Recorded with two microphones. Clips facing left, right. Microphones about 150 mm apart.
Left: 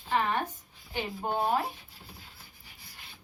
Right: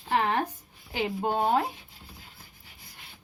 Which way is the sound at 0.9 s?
75° right (ahead or behind).